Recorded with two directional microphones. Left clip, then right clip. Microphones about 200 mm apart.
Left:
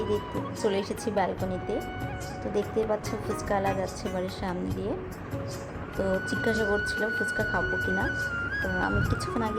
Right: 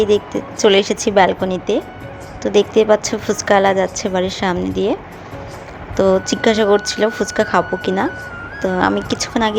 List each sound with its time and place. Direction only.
0.1 s speech: 30° right (ahead or behind)
6.0 s speech: 30° right (ahead or behind)